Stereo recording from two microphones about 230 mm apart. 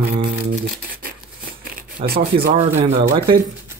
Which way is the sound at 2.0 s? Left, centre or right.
Right.